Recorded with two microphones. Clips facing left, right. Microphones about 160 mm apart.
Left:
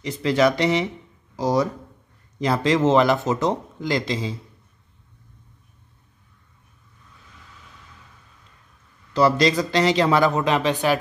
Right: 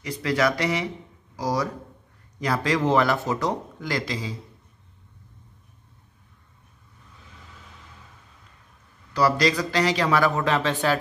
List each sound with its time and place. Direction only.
0.0 s a man's voice: 25° left (ahead or behind)
9.1 s a man's voice: 25° left (ahead or behind)